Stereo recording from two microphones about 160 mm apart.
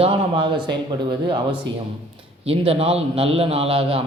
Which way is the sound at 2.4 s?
40° right (ahead or behind).